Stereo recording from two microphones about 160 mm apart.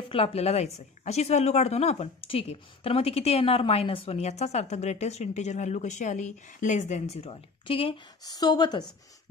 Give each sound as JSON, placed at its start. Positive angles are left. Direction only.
{"t": 0.1, "sound": "speech", "side_deg": 40}